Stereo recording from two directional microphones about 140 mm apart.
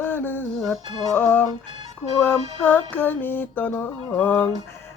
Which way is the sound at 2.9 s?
15° left (ahead or behind).